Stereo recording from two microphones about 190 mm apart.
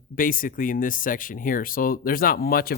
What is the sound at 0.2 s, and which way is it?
Speech, 45° left (ahead or behind).